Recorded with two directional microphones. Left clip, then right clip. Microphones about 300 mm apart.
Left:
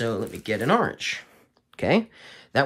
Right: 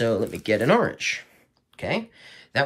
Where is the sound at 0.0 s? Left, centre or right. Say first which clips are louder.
Right 4 dB; centre.